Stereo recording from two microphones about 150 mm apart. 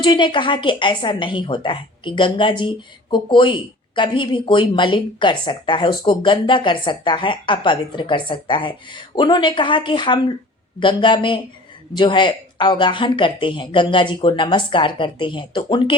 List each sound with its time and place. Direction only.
0.0 s a woman's voice: 30° left (ahead or behind)